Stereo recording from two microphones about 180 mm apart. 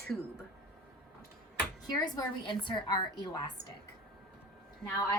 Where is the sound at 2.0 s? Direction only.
25° left (ahead or behind).